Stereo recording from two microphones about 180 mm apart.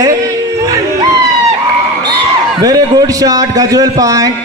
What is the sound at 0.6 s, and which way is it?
Music, 20° right (ahead or behind).